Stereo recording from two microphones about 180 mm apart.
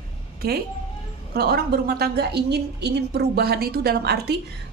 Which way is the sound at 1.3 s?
60° right (ahead or behind).